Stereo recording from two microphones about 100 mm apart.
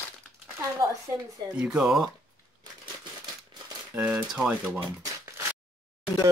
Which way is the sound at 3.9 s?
15° right (ahead or behind).